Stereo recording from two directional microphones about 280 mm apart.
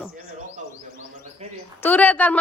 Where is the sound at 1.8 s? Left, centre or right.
Centre.